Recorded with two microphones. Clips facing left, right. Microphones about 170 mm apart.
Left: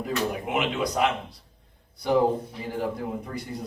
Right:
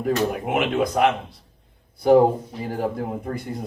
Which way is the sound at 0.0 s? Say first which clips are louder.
Right 5 dB; 50° right (ahead or behind).